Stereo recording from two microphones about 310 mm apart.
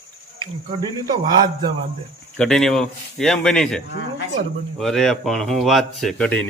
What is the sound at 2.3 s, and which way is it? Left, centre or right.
Speech, centre.